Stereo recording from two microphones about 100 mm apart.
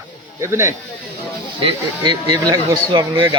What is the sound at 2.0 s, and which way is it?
Speech, 40° right (ahead or behind).